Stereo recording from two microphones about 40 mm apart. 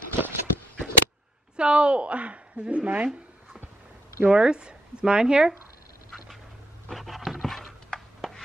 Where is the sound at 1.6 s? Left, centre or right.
Right.